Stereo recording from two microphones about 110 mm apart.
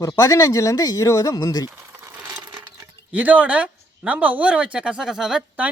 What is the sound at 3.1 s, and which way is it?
Speech, 15° right (ahead or behind).